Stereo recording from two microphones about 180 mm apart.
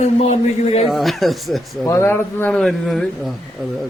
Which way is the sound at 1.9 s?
15° left (ahead or behind).